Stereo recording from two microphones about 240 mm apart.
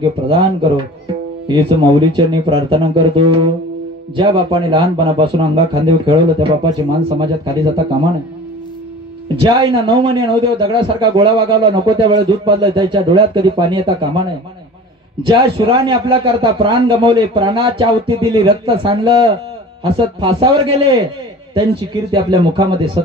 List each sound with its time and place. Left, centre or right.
0.0 s a man's voice: centre
1.5 s a man's voice: centre
9.4 s a man's voice: centre
15.2 s a man's voice: centre